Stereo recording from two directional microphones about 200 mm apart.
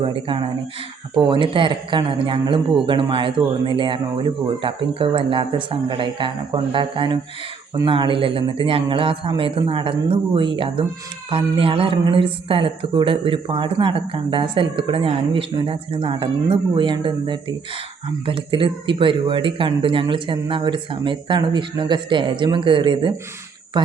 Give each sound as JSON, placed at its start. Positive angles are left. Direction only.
{"t": 0.0, "sound": "speech", "side_deg": -25}